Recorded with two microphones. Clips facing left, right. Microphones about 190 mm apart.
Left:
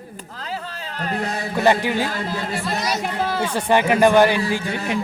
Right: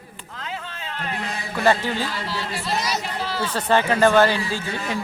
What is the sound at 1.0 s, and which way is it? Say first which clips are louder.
Speech: left 5 dB; 40° left (ahead or behind).